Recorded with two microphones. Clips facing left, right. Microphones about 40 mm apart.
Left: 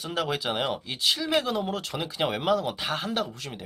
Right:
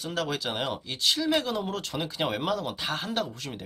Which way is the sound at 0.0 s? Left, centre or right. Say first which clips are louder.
Left 2 dB; centre.